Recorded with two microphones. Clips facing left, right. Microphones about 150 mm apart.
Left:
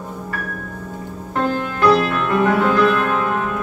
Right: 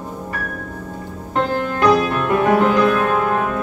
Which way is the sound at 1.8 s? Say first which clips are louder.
Even; 15° right (ahead or behind).